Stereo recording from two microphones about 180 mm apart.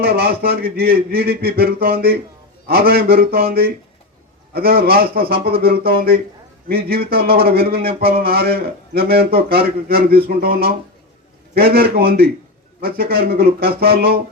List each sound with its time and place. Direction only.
0.0 s a man's voice: 60° right (ahead or behind)